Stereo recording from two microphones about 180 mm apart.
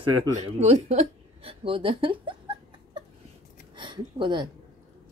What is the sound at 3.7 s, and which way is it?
Speech, 25° right (ahead or behind).